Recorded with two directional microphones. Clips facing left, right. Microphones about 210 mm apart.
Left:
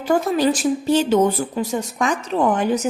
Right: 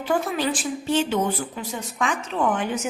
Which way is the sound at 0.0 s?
40° left (ahead or behind).